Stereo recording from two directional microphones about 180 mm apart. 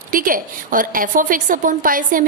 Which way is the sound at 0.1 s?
50° right (ahead or behind).